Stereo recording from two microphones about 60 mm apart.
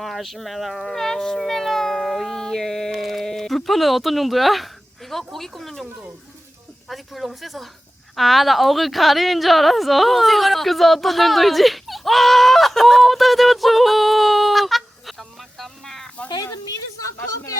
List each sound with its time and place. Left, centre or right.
0.0 s speech: centre
6.8 s a woman's voice: centre
16.3 s speech: left